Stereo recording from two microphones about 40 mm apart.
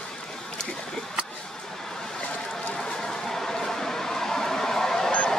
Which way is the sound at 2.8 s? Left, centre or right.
Centre.